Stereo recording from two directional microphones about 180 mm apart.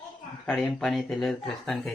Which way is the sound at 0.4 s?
Centre (ahead or behind).